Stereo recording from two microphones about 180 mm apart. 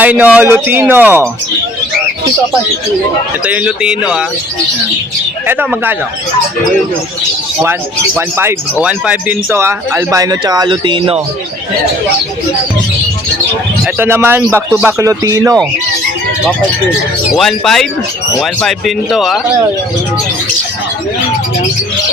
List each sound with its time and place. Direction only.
0.0 s speech: 10° right (ahead or behind)
3.4 s speech: 5° right (ahead or behind)
5.5 s speech: 10° right (ahead or behind)
7.6 s speech: 10° right (ahead or behind); by 11.2 s 30° right (ahead or behind)
13.8 s speech: 10° right (ahead or behind)
17.3 s speech: centre (ahead or behind)